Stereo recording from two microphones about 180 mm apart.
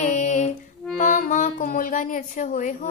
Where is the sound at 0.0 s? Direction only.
40° left (ahead or behind).